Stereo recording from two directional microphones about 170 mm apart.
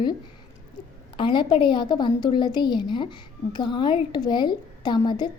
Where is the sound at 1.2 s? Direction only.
30° left (ahead or behind).